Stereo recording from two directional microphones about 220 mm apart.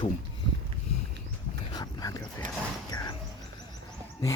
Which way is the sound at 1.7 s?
15° left (ahead or behind).